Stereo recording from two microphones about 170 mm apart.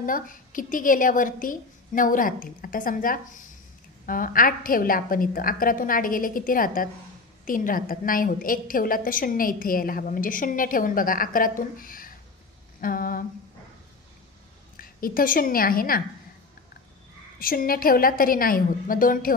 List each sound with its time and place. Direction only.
0.0 s a woman's voice: 55° left (ahead or behind)
12.8 s a sound: 55° left (ahead or behind)
14.8 s a woman's voice: 55° left (ahead or behind)
17.4 s a woman's voice: 55° left (ahead or behind)